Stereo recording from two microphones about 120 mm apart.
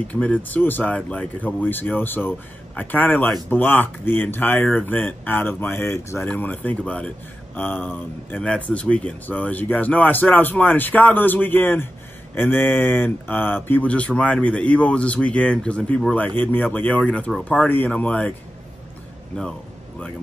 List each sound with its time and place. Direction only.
0.1 s speech: 10° left (ahead or behind)